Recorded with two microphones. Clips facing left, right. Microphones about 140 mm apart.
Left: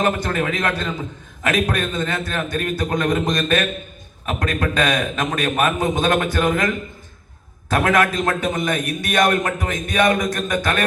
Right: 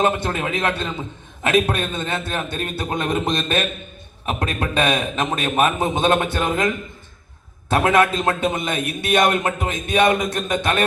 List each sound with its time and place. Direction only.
0.0 s a man's voice: 25° right (ahead or behind)
7.7 s a man's voice: 25° right (ahead or behind)